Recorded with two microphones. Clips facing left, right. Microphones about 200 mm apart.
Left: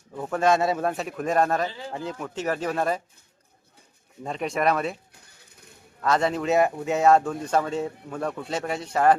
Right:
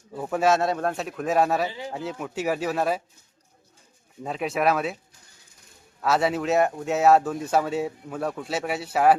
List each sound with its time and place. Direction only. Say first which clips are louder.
0.2 s speech: even; 5° right (ahead or behind)
4.2 s speech: right 1 dB; 5° right (ahead or behind)
6.0 s speech: even; 5° right (ahead or behind)